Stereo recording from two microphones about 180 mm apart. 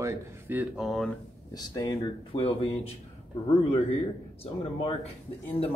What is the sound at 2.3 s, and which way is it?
Speech, 30° left (ahead or behind).